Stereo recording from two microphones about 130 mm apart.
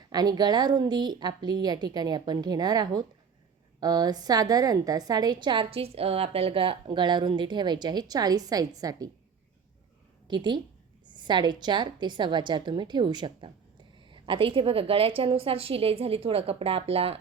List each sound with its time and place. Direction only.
0.1 s a woman's voice: 30° right (ahead or behind)
10.2 s a woman's voice: 35° right (ahead or behind)